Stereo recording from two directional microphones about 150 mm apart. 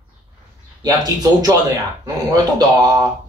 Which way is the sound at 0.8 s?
25° right (ahead or behind).